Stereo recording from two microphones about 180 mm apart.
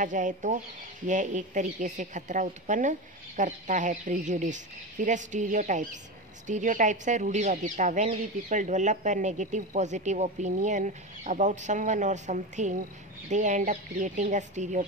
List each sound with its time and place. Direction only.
0.0 s speech: 45° right (ahead or behind)